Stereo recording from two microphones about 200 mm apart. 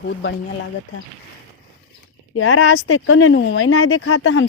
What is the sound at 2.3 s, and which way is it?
Speech, 90° left.